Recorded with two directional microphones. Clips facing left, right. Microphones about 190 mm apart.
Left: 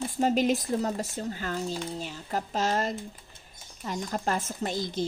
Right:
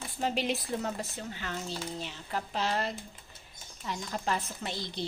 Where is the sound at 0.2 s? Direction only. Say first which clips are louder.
Left 7 dB; 45° left (ahead or behind).